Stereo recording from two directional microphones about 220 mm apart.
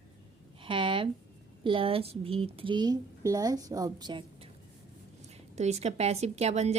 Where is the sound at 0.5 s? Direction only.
25° right (ahead or behind).